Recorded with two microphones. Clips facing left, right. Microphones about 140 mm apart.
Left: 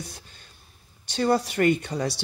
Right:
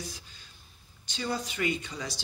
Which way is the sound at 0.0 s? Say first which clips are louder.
Left 1 dB; 60° left (ahead or behind).